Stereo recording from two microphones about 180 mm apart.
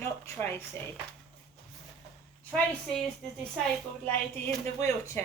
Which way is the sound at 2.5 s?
Centre (ahead or behind).